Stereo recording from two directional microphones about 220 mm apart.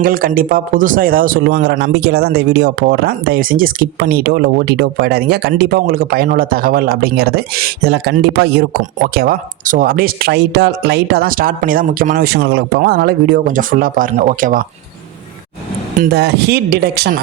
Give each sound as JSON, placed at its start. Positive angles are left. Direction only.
{"t": 0.0, "sound": "speech", "side_deg": -40}
{"t": 16.0, "sound": "speech", "side_deg": -50}